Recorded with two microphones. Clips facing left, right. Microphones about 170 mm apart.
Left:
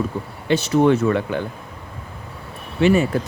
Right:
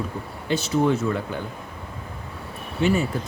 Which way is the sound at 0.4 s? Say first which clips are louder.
Left 5 dB; 70° left (ahead or behind).